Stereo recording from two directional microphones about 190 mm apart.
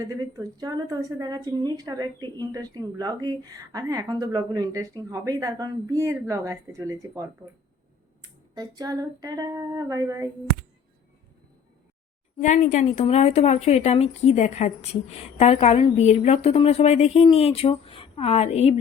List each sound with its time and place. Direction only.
0.0 s a woman's voice: 20° right (ahead or behind)
12.4 s a woman's voice: 40° left (ahead or behind)